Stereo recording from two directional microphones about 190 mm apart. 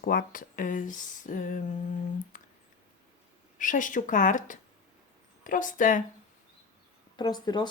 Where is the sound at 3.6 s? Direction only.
45° left (ahead or behind).